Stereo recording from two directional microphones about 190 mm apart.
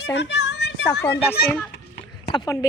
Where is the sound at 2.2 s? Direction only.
20° left (ahead or behind).